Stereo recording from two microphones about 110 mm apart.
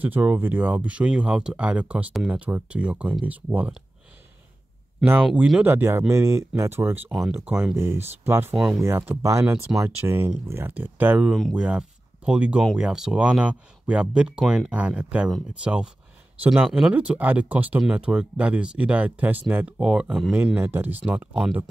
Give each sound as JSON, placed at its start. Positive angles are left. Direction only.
{"t": 0.0, "sound": "speech", "side_deg": -15}
{"t": 5.6, "sound": "speech", "side_deg": -20}
{"t": 20.5, "sound": "speech", "side_deg": -20}